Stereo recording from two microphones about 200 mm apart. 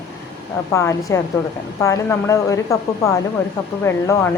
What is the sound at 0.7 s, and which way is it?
A woman's voice, 15° left (ahead or behind).